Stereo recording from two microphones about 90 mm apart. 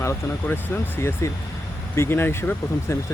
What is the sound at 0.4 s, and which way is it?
Speech, 25° left (ahead or behind).